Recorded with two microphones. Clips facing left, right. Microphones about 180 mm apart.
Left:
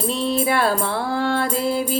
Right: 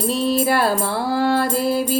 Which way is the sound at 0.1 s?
5° right (ahead or behind).